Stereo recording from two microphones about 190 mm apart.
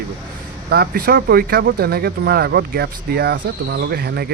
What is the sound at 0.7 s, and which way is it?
Speech, 55° right (ahead or behind).